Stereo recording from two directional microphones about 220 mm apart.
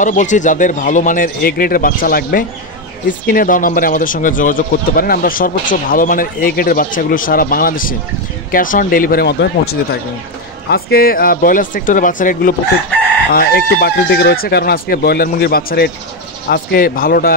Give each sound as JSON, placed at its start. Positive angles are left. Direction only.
{"t": 0.0, "sound": "speech", "side_deg": 35}
{"t": 13.7, "sound": "speech", "side_deg": 45}